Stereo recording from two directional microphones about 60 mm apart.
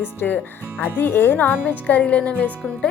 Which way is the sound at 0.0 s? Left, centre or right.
Left.